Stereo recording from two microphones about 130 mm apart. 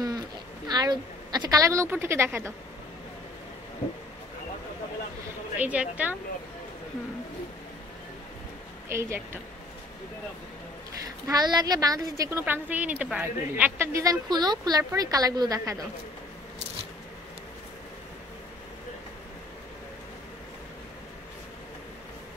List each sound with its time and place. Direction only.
0.7 s a woman's voice: 30° right (ahead or behind)
5.6 s speech: 10° right (ahead or behind)
8.8 s a woman's voice: 20° right (ahead or behind)
11.2 s a woman's voice: 30° right (ahead or behind)